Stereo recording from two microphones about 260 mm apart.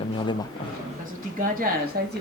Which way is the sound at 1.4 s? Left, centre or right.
Right.